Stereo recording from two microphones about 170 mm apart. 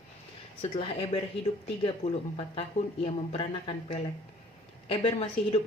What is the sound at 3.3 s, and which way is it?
Speech, 30° left (ahead or behind).